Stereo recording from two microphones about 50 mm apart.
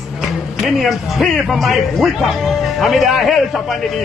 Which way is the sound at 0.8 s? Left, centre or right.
Centre.